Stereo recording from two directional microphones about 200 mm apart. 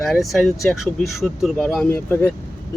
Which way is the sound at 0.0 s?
Centre (ahead or behind).